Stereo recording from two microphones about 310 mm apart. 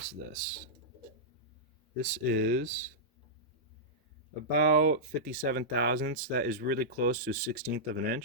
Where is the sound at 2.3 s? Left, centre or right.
Right.